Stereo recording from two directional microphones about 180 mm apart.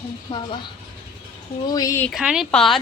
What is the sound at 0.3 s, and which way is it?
Speech, 30° left (ahead or behind).